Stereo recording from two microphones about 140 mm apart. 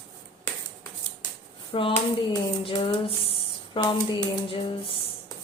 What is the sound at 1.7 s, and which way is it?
Speech, 40° left (ahead or behind).